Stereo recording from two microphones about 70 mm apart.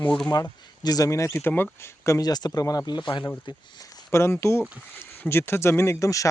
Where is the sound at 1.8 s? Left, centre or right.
Left.